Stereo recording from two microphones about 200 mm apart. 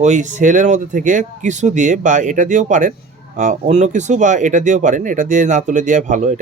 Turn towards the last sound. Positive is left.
turn(degrees=-40)  # may be behind; listen again after turning